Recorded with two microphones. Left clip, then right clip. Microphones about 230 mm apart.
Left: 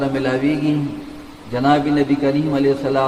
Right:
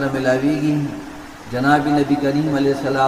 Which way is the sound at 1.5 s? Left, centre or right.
Left.